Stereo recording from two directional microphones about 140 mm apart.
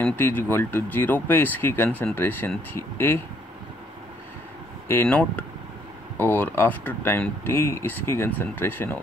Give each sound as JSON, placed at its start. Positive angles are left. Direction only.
{"t": 0.0, "sound": "speech", "side_deg": 15}
{"t": 4.8, "sound": "speech", "side_deg": 10}